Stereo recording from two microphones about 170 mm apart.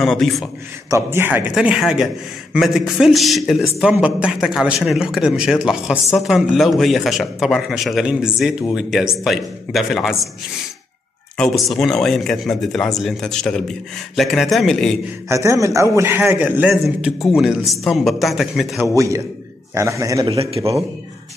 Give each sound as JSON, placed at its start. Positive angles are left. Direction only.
{"t": 0.0, "sound": "a man's voice", "side_deg": 0}
{"t": 0.8, "sound": "a man's voice", "side_deg": -15}
{"t": 11.3, "sound": "a man's voice", "side_deg": 0}
{"t": 15.2, "sound": "a man's voice", "side_deg": -15}
{"t": 18.9, "sound": "a man's voice", "side_deg": -20}
{"t": 20.3, "sound": "a man's voice", "side_deg": -35}